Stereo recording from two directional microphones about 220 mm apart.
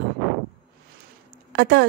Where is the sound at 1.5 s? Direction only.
50° right (ahead or behind).